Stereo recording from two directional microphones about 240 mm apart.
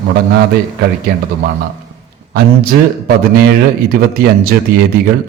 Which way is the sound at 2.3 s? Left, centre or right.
Right.